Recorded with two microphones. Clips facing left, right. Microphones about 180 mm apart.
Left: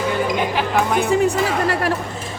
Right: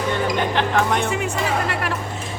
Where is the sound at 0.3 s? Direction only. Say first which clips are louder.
Left 1 dB; 5° left (ahead or behind).